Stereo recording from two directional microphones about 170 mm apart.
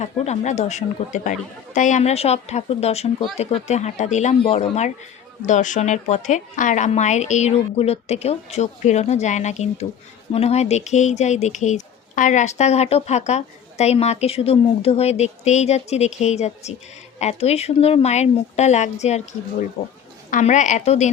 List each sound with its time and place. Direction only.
0.0 s a woman's voice: 40° left (ahead or behind)
20.3 s a woman's voice: 45° left (ahead or behind)